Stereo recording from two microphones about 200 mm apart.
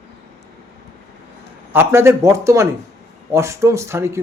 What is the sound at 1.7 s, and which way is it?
Speech, 10° right (ahead or behind).